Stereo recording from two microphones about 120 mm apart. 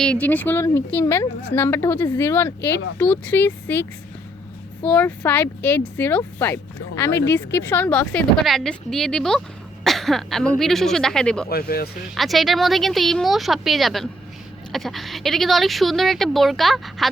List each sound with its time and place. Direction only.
0.0 s a woman's voice: 10° left (ahead or behind)